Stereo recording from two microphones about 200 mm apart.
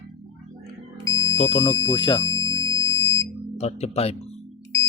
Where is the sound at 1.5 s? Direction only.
25° left (ahead or behind).